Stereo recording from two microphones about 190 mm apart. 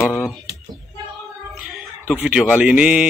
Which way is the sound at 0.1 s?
Centre (ahead or behind).